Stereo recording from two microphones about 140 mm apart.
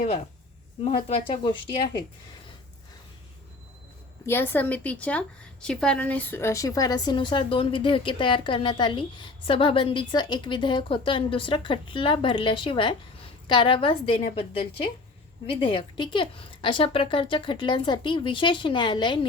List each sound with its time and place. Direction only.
1.0 s speech: 40° left (ahead or behind)
4.3 s a woman's voice: 15° left (ahead or behind); by 19.2 s 35° left (ahead or behind)